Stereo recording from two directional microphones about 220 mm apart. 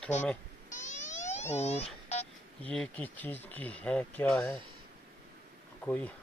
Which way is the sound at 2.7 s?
5° left (ahead or behind).